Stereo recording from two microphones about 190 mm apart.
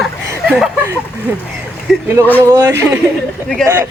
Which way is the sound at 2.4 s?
20° right (ahead or behind).